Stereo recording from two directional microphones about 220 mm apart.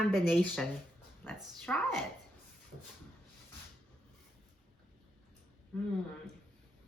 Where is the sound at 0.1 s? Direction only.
Centre (ahead or behind).